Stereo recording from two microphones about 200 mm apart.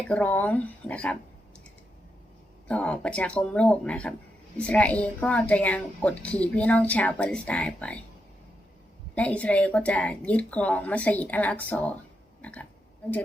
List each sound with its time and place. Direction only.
0.1 s a woman's voice: 5° left (ahead or behind)
2.6 s a woman's voice: 5° left (ahead or behind)
9.1 s a woman's voice: 5° left (ahead or behind)